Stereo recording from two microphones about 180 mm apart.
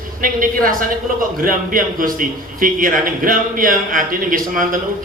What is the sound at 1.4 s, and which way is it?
A man's voice, 50° right (ahead or behind).